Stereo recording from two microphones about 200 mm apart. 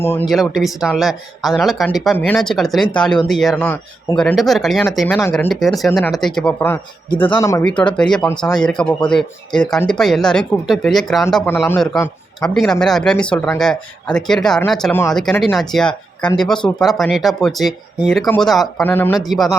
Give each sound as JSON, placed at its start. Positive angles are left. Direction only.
{"t": 0.0, "sound": "speech", "side_deg": 10}
{"t": 0.3, "sound": "speech", "side_deg": 0}
{"t": 7.3, "sound": "speech", "side_deg": 20}
{"t": 7.6, "sound": "speech", "side_deg": 5}